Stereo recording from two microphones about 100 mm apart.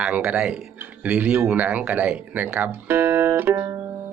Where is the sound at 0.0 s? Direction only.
10° right (ahead or behind).